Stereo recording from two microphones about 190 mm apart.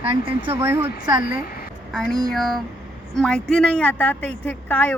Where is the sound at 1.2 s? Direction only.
50° left (ahead or behind).